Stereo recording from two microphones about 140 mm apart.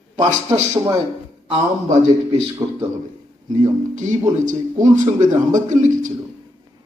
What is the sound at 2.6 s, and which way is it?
Speech, 20° right (ahead or behind).